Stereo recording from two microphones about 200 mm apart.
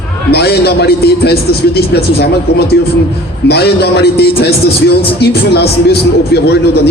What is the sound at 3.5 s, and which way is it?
A man's voice, 55° left (ahead or behind).